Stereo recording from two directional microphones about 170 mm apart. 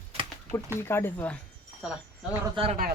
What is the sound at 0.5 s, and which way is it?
Speech, 15° left (ahead or behind).